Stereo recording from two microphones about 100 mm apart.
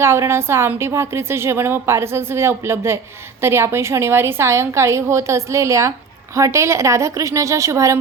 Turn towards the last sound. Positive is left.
turn(degrees=-30)  # may be behind; listen again after turning